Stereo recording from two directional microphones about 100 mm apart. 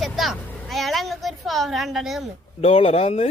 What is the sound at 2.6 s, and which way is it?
Speech, 85° left.